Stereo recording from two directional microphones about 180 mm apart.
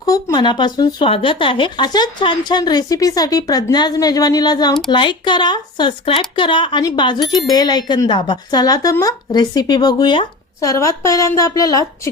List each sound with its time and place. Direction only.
0.0 s speech: 20° left (ahead or behind)